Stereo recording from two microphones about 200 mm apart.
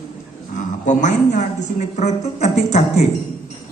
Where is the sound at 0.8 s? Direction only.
35° left (ahead or behind).